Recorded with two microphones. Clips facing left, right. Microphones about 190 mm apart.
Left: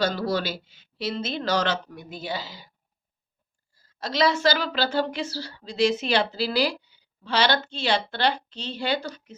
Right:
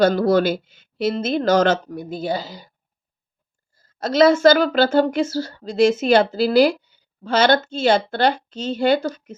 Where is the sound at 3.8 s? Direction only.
45° right (ahead or behind).